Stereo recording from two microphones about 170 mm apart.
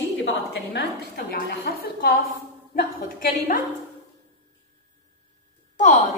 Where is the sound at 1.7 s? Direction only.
70° left (ahead or behind).